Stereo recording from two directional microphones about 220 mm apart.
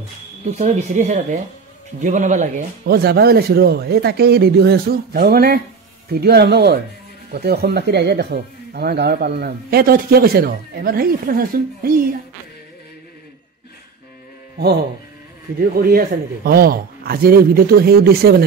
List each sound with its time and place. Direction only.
0.6 s speech: 35° right (ahead or behind)
15.6 s speech: 40° right (ahead or behind)